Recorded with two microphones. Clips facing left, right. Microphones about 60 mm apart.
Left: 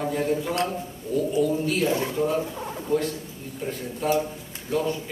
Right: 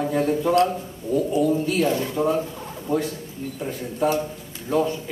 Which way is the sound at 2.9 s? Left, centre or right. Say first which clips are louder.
Right 1 dB; centre.